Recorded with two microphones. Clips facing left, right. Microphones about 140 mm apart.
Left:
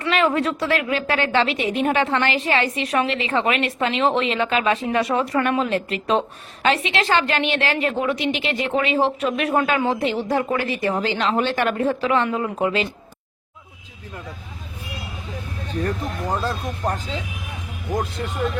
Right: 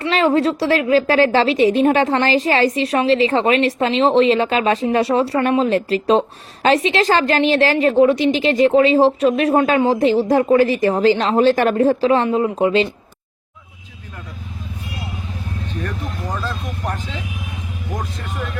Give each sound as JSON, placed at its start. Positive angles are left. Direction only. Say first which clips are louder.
{"t": 0.0, "sound": "speech", "louder": "right 4 dB", "side_deg": -30}
{"t": 16.3, "sound": "speech", "louder": "left 2 dB", "side_deg": 40}